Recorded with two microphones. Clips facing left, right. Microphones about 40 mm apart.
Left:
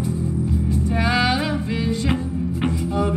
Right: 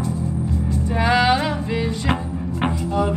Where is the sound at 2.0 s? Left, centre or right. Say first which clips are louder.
Even; right.